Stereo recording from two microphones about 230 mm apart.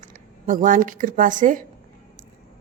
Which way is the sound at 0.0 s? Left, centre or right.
Right.